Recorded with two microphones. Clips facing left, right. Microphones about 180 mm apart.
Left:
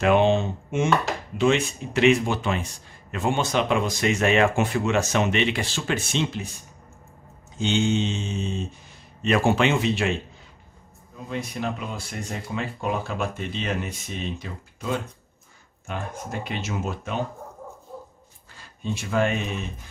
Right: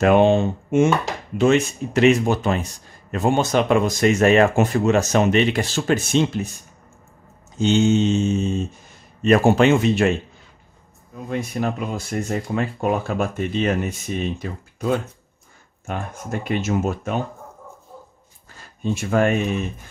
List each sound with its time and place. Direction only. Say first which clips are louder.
0.0 s speech: right 4 dB; 45° right (ahead or behind)
7.5 s speech: right 6 dB; 40° right (ahead or behind)
11.2 s speech: right 5 dB; 50° right (ahead or behind)
18.6 s speech: right 6 dB; 50° right (ahead or behind)